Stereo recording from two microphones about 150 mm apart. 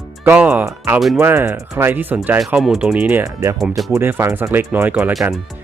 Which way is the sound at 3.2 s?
20° right (ahead or behind).